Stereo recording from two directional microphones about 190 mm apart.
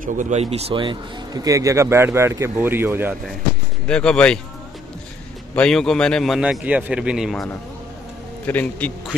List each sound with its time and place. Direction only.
0.0 s a man's voice: 40° right (ahead or behind); by 3.2 s 10° right (ahead or behind)
3.8 s a man's voice: 5° left (ahead or behind)
5.6 s a man's voice: 5° left (ahead or behind)
8.5 s a man's voice: 10° left (ahead or behind)